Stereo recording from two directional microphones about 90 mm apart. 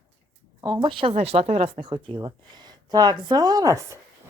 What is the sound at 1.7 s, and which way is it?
A woman's voice, 65° right (ahead or behind).